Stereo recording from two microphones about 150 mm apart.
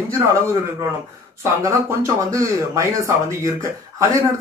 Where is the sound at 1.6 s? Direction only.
20° right (ahead or behind).